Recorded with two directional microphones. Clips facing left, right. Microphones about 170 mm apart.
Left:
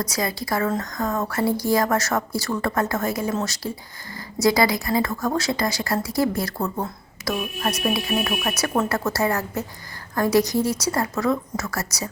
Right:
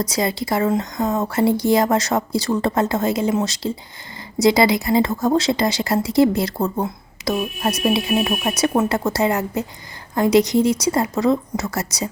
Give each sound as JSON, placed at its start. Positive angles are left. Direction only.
{"t": 0.0, "sound": "speech", "side_deg": -25}